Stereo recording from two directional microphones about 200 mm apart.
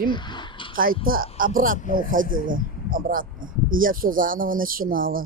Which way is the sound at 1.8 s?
40° left (ahead or behind).